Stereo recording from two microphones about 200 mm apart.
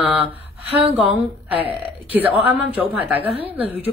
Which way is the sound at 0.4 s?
30° right (ahead or behind).